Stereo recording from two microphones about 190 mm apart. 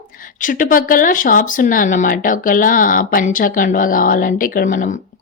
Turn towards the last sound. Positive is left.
turn(degrees=45)  # may be behind; listen again after turning